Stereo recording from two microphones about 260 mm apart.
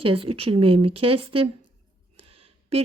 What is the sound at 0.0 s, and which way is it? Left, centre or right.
A woman's voice, right.